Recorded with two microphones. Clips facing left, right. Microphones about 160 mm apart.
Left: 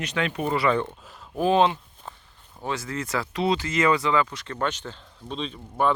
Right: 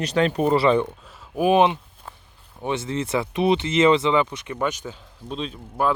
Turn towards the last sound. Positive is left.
turn(degrees=-5)  # may be behind; listen again after turning